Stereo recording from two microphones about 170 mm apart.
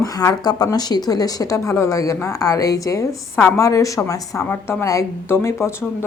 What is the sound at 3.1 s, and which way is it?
Speech, 5° left (ahead or behind).